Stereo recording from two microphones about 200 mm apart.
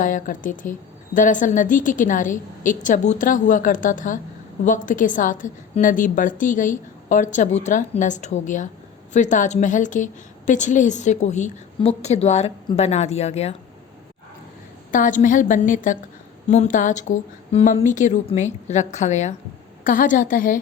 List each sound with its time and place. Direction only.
0.0 s a woman's voice: 40° left (ahead or behind)
14.9 s a woman's voice: 40° left (ahead or behind)